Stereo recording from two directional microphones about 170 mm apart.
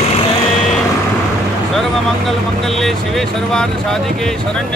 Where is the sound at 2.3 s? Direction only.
Centre (ahead or behind).